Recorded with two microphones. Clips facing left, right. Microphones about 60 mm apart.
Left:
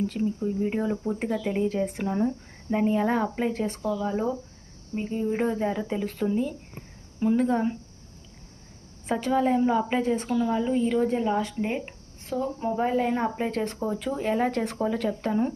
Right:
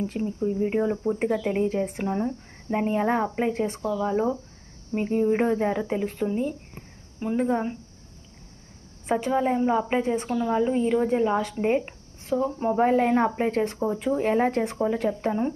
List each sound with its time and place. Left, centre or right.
0.4 s a woman's voice: right
2.7 s a woman's voice: right
4.9 s speech: right
6.1 s a woman's voice: centre
9.0 s a woman's voice: centre
10.6 s a woman's voice: right
12.5 s speech: right
13.7 s a woman's voice: centre
14.2 s speech: right
14.6 s speech: centre